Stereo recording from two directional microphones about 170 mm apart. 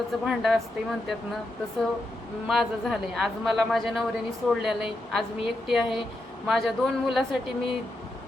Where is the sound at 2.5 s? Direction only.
Centre (ahead or behind).